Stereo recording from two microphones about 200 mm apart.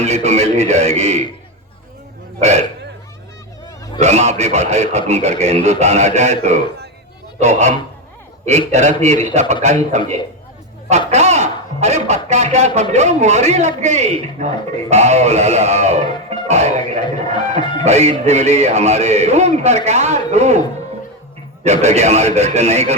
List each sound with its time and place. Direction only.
0.0 s speech: 35° right (ahead or behind)
2.4 s speech: 35° right (ahead or behind)
4.0 s speech: 35° right (ahead or behind)
11.1 s speech: 35° right (ahead or behind)
17.0 s speech: 20° left (ahead or behind)
17.8 s speech: 35° right (ahead or behind)
21.6 s speech: 35° right (ahead or behind)